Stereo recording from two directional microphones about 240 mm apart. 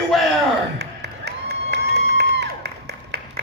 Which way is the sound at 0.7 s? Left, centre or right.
Right.